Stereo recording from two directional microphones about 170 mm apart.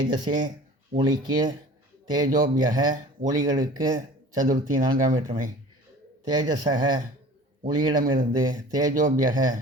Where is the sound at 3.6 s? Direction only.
25° right (ahead or behind).